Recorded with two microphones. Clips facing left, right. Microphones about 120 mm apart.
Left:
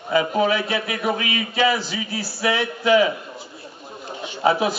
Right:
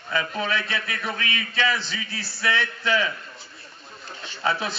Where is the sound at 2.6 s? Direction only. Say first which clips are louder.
Left 11 dB; 10° left (ahead or behind).